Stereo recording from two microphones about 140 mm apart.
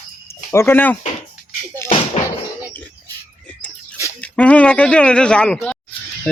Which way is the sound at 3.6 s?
15° left (ahead or behind).